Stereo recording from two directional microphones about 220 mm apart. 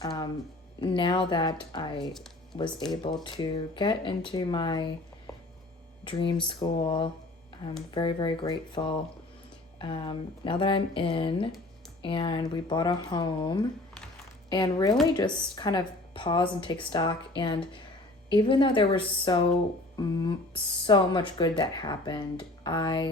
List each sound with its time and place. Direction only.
0.0 s music: 15° left (ahead or behind)
0.8 s speech: 20° left (ahead or behind)
2.1 s a sound: centre (ahead or behind)
2.6 s speech: 20° left (ahead or behind)